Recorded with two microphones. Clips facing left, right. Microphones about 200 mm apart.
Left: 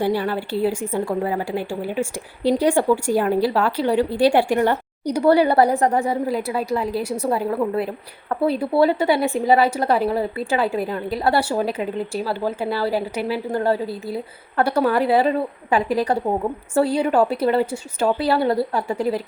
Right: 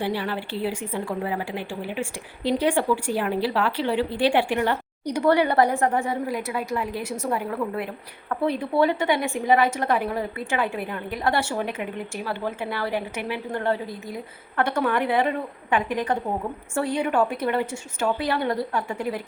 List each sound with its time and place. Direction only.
0.0 s a woman's voice: 45° left (ahead or behind)